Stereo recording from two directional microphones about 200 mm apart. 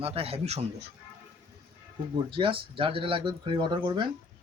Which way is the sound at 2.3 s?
25° right (ahead or behind).